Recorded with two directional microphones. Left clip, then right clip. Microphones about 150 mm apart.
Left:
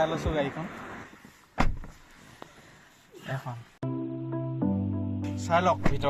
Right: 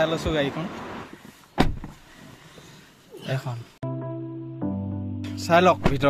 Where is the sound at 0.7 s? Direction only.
Centre (ahead or behind).